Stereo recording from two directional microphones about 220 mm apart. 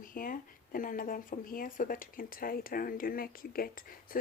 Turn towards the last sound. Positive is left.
turn(degrees=40)  # may be behind; listen again after turning